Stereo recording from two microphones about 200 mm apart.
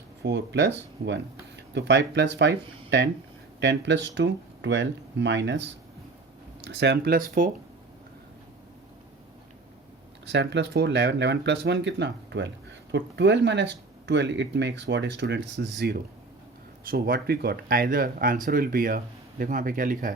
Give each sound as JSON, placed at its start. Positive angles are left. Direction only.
{"t": 0.2, "sound": "speech", "side_deg": -60}
{"t": 6.7, "sound": "speech", "side_deg": -60}
{"t": 10.2, "sound": "speech", "side_deg": -60}